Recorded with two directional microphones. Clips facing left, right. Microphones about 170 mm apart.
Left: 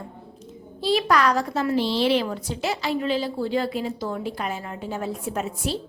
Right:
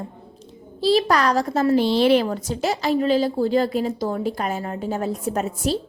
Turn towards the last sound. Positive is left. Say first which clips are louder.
# right 4 dB
turn(degrees=-40)  # may be behind; listen again after turning